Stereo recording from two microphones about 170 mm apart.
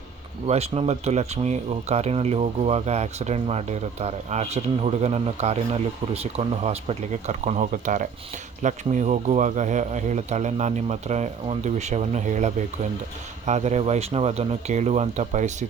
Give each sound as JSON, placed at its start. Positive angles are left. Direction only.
{"t": 0.4, "sound": "speech", "side_deg": -40}